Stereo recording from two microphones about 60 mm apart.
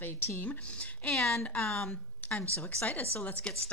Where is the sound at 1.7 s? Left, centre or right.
Centre.